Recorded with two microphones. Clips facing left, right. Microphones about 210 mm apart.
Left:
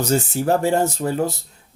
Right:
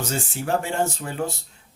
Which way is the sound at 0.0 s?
40° left (ahead or behind).